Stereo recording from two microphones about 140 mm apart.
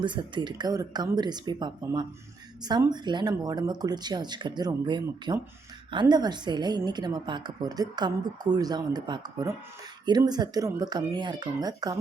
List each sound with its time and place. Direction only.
0.0 s a woman's voice: 35° right (ahead or behind)